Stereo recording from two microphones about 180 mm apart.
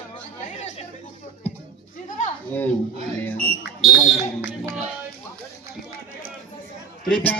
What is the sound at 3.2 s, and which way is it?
Smoke detector, 5° left (ahead or behind).